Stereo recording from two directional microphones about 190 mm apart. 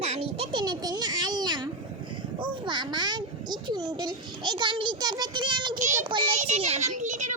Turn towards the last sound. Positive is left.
turn(degrees=-40)  # may be behind; listen again after turning